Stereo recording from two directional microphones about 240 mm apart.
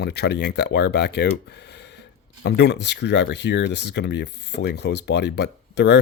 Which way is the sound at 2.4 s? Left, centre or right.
Left.